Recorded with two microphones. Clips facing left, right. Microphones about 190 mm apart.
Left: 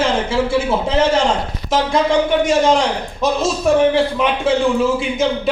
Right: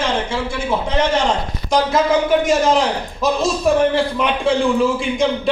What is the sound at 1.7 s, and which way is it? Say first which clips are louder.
A man's voice: even; centre (ahead or behind).